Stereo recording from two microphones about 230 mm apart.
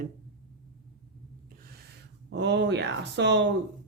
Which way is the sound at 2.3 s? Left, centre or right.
Right.